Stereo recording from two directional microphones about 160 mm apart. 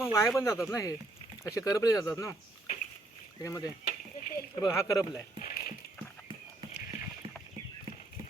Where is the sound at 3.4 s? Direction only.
20° left (ahead or behind).